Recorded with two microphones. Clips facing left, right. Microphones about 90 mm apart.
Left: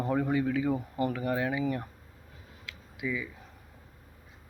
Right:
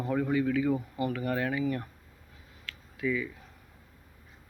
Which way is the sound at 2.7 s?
15° left (ahead or behind).